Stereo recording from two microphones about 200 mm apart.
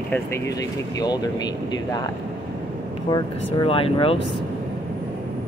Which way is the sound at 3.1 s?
25° left (ahead or behind).